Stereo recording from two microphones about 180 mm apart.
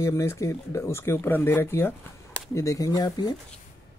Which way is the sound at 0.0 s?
15° left (ahead or behind).